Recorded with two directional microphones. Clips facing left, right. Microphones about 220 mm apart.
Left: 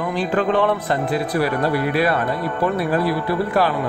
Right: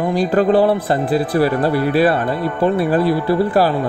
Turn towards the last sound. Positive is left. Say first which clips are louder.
# right 4 dB
turn(degrees=-30)  # may be behind; listen again after turning